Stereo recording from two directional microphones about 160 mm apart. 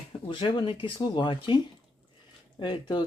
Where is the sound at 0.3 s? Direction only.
30° left (ahead or behind).